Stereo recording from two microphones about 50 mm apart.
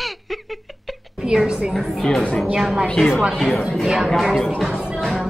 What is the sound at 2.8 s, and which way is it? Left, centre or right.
Speech, centre.